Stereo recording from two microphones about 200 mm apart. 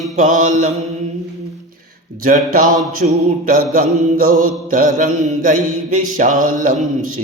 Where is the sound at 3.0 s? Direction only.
40° right (ahead or behind).